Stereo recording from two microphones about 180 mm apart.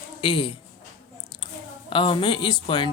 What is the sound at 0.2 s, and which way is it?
Speech, 30° left (ahead or behind).